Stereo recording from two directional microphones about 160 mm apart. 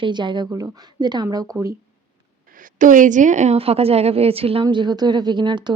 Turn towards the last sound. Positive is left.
turn(degrees=-30)  # may be behind; listen again after turning